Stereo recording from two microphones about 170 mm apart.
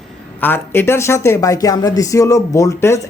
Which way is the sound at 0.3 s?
10° left (ahead or behind).